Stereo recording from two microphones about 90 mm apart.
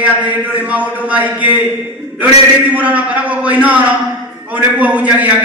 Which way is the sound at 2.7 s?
15° right (ahead or behind).